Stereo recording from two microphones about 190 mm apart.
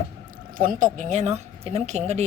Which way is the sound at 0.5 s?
45° right (ahead or behind).